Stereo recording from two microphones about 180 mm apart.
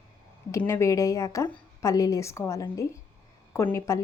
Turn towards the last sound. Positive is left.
turn(degrees=15)  # may be behind; listen again after turning